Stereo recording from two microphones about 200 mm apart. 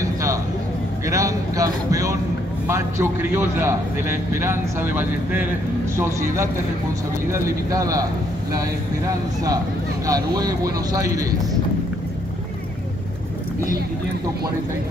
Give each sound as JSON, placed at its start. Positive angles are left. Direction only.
{"t": 0.0, "sound": "a sound", "side_deg": -15}
{"t": 2.7, "sound": "a man's voice", "side_deg": -10}
{"t": 10.0, "sound": "a man's voice", "side_deg": -15}